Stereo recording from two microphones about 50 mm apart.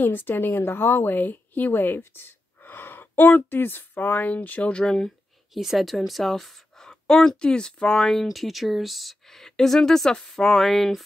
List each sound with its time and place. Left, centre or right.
0.0 s a woman's voice: left
4.7 s speech: centre
5.5 s speech: centre
6.9 s speech: centre
8.0 s speech: centre